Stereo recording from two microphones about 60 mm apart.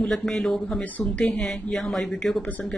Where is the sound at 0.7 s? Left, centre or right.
Centre.